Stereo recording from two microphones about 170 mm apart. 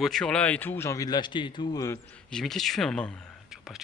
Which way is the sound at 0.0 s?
5° left (ahead or behind).